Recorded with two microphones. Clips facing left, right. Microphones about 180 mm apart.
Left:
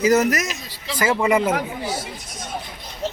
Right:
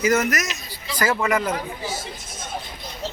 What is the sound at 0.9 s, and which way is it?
Speech, 25° left (ahead or behind).